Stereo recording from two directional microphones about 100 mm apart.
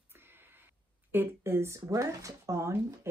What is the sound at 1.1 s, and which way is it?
Speech, 20° right (ahead or behind).